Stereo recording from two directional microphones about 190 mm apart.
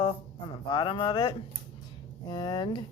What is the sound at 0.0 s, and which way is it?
Speech, 25° left (ahead or behind).